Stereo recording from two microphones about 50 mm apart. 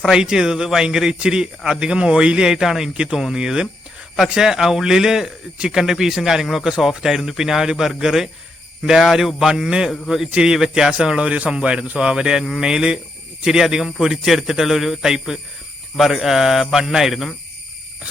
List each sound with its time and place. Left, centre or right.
0.0 s a man's voice: centre